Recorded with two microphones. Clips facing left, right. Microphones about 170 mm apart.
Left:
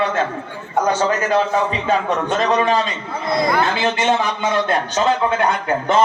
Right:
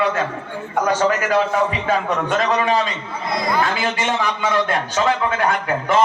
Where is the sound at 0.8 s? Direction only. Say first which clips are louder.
Right 1 dB; 25° left (ahead or behind).